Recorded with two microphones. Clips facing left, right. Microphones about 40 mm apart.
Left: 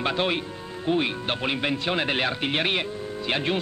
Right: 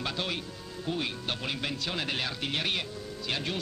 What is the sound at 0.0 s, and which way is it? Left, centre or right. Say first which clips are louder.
Speech: left 8 dB; left.